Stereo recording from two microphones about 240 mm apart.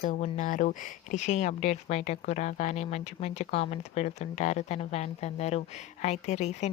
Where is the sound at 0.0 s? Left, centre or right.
Left.